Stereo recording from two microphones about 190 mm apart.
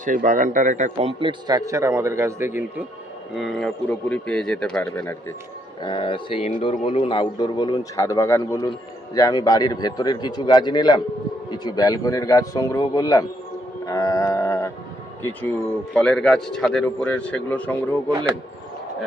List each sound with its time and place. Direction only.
0.0 s a man's voice: 45° right (ahead or behind)
1.5 s a man's voice: 15° right (ahead or behind)
3.3 s speech: centre (ahead or behind)
5.8 s speech: 25° left (ahead or behind)
13.8 s music: 15° left (ahead or behind)
15.2 s speech: 5° left (ahead or behind)